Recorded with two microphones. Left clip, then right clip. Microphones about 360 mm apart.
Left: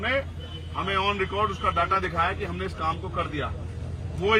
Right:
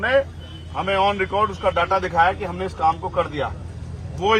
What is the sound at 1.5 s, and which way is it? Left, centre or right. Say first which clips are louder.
Speech: right 4 dB; centre.